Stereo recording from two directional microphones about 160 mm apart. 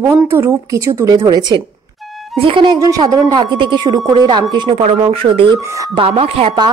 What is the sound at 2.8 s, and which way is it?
Speech, 20° right (ahead or behind).